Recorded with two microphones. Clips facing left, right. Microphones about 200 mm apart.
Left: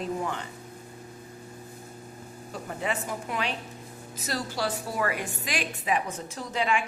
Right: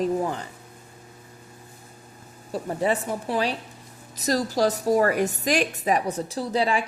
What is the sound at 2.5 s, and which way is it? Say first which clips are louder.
A woman's voice: right 8 dB; 35° right (ahead or behind).